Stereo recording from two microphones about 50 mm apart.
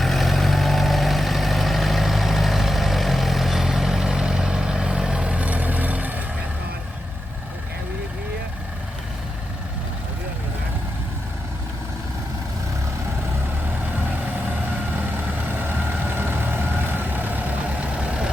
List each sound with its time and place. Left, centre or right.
0.0 s vehicle: centre; by 6.2 s right
15.4 s vehicle: right